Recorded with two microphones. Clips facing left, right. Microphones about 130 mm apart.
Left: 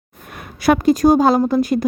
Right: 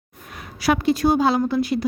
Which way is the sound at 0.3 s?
50° left (ahead or behind).